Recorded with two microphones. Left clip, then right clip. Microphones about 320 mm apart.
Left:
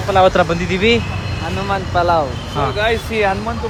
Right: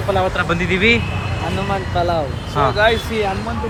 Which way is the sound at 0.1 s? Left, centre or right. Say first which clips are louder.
Left 6 dB; centre.